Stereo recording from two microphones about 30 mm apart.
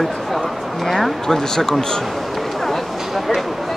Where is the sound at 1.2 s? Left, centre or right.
Centre.